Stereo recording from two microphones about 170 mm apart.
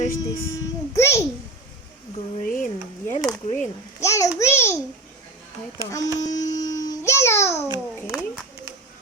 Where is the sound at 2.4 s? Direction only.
55° left (ahead or behind).